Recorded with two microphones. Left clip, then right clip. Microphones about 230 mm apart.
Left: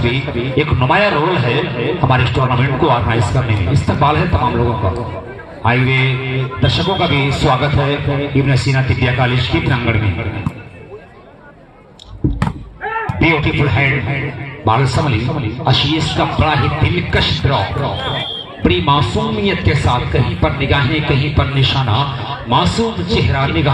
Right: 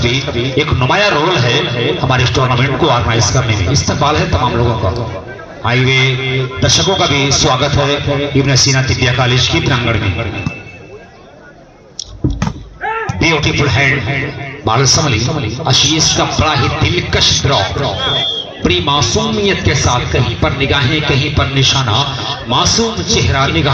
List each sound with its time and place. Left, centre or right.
0.0 s a man's voice: right
12.2 s a sound: right
13.1 s a man's voice: right